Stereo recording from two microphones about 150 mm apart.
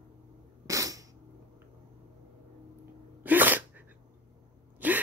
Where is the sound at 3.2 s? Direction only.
10° right (ahead or behind).